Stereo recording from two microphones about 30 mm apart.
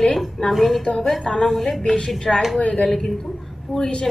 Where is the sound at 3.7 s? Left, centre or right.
Right.